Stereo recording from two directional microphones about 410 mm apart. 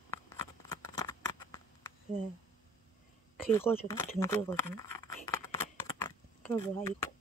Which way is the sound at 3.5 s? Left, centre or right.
Centre.